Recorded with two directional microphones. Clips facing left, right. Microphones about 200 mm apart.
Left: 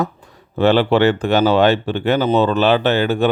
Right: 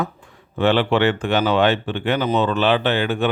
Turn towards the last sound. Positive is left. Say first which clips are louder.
# left 4 dB
turn(degrees=35)  # may be behind; listen again after turning